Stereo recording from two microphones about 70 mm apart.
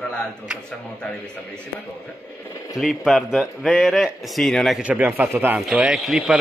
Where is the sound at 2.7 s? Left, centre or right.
Centre.